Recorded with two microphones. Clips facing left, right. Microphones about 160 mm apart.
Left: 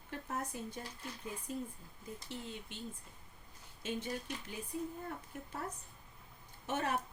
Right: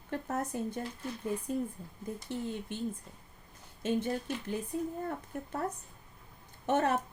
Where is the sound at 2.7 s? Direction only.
50° right (ahead or behind).